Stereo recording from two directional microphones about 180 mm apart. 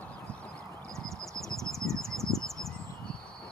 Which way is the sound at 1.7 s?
Centre (ahead or behind).